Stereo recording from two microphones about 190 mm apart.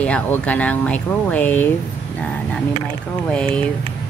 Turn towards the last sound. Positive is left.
turn(degrees=5)  # may be behind; listen again after turning